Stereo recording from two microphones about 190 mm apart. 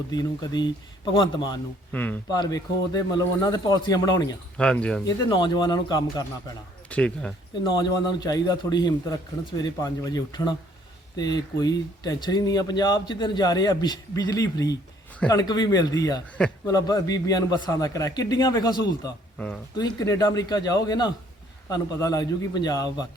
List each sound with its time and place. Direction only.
0.1 s speech: 20° left (ahead or behind)
1.9 s speech: 10° left (ahead or behind)
2.3 s speech: 20° left (ahead or behind)
4.5 s speech: 5° left (ahead or behind)
5.0 s speech: 25° left (ahead or behind)
6.8 s speech: 5° left (ahead or behind)
7.7 s speech: 20° left (ahead or behind)